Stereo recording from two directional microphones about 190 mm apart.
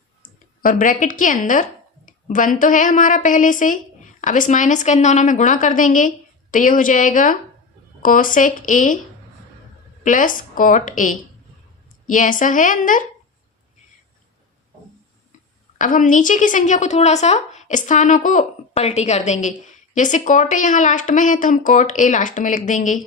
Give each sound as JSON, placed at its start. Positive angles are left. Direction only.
{"t": 0.6, "sound": "a woman's voice", "side_deg": 45}
{"t": 10.0, "sound": "a woman's voice", "side_deg": 45}
{"t": 15.8, "sound": "a woman's voice", "side_deg": 45}